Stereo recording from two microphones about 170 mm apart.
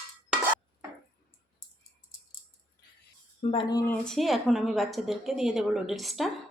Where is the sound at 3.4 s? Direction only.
30° left (ahead or behind).